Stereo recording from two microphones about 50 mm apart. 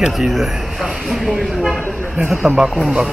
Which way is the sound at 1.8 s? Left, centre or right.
Left.